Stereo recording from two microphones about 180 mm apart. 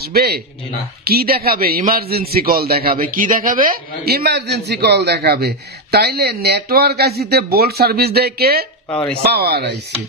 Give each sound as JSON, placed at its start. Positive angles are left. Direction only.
{"t": 0.0, "sound": "a man's voice", "side_deg": -60}